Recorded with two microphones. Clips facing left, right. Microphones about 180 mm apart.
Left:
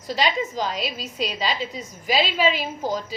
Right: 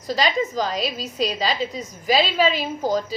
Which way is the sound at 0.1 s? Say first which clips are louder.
Right 2 dB; 40° right (ahead or behind).